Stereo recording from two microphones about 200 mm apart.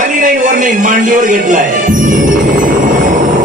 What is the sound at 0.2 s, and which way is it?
Music, 40° right (ahead or behind).